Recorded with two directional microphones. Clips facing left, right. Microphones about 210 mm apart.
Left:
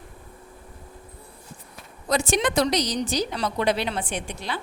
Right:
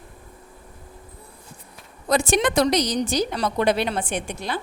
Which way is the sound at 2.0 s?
55° right (ahead or behind).